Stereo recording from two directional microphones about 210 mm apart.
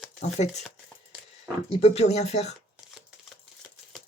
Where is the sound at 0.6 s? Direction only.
5° right (ahead or behind).